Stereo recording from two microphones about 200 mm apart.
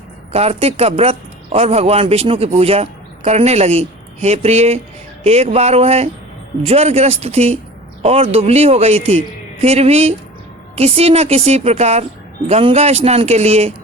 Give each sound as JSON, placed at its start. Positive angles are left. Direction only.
{"t": 0.3, "sound": "a man's voice", "side_deg": -30}